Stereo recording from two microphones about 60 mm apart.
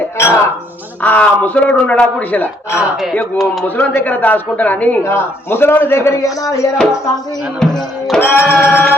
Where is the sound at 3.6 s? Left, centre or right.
Left.